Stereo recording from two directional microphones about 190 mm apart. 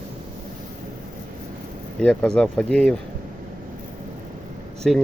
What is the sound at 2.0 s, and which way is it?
Speech, 5° left (ahead or behind).